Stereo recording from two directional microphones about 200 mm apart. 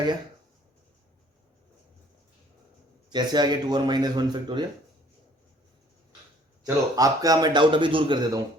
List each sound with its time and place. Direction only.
3.1 s a man's voice: 20° right (ahead or behind)
6.7 s a man's voice: 15° right (ahead or behind)